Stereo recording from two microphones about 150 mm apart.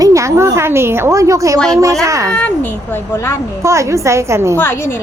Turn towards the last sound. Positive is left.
turn(degrees=15)  # may be behind; listen again after turning